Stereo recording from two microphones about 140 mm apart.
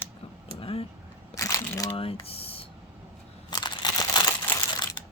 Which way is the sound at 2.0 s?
40° left (ahead or behind).